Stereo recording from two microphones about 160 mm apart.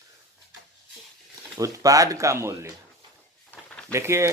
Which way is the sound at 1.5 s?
20° right (ahead or behind).